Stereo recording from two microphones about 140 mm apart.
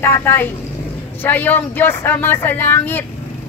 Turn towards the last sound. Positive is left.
turn(degrees=15)  # may be behind; listen again after turning